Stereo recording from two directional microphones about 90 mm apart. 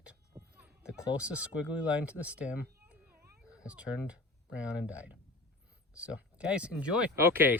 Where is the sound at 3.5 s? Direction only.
10° right (ahead or behind).